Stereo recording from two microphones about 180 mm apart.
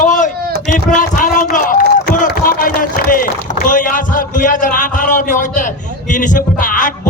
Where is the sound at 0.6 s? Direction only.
45° left (ahead or behind).